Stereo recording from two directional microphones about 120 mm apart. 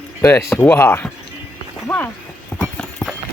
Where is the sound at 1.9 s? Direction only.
5° left (ahead or behind).